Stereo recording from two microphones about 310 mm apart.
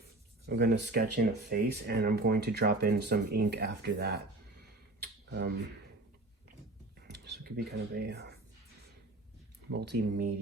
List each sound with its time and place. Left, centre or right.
0.4 s speech: right
4.9 s a sound: right
7.1 s speech: right
9.7 s speech: right